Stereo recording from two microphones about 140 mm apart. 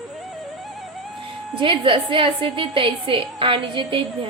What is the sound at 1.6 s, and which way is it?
A woman's voice, 35° right (ahead or behind).